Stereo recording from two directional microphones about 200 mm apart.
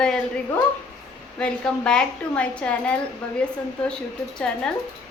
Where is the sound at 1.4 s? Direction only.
5° left (ahead or behind).